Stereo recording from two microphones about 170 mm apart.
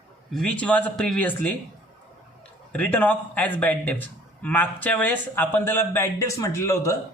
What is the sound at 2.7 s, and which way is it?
A man's voice, 10° left (ahead or behind).